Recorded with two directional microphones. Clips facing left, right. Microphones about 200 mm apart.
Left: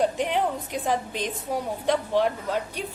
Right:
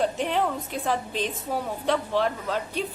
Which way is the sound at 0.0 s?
15° left (ahead or behind).